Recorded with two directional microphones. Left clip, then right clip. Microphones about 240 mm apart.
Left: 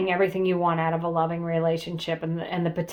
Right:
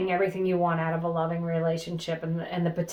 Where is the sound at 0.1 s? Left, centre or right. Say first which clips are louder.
Left 3 dB; left.